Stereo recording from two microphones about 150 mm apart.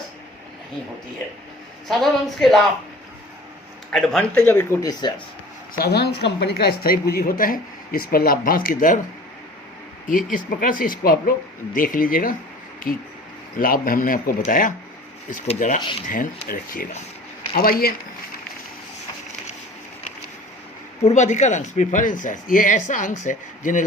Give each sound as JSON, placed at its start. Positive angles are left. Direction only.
{"t": 1.9, "sound": "a woman's voice", "side_deg": 0}
{"t": 3.9, "sound": "a woman's voice", "side_deg": 0}
{"t": 4.4, "sound": "speech", "side_deg": 15}
{"t": 5.7, "sound": "a woman's voice", "side_deg": 90}
{"t": 10.1, "sound": "speech", "side_deg": 60}
{"t": 21.0, "sound": "speech", "side_deg": 50}